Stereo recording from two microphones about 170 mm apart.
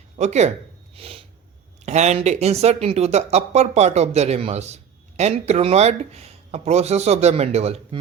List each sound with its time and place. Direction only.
0.2 s speech: 40° right (ahead or behind)
0.9 s snort: 35° right (ahead or behind)
1.8 s speech: 40° right (ahead or behind)